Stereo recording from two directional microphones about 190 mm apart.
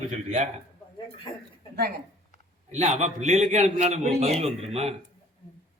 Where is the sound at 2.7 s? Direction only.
40° right (ahead or behind).